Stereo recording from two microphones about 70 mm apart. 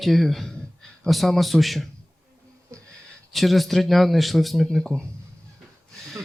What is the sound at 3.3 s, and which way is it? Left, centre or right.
Speech, centre.